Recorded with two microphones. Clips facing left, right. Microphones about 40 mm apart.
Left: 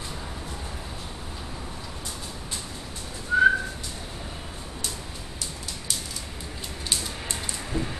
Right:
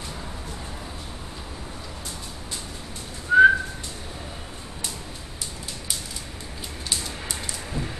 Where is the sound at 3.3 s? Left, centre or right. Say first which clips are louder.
Right 7 dB; right.